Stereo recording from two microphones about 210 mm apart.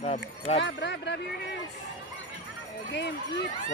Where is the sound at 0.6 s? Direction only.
55° left (ahead or behind).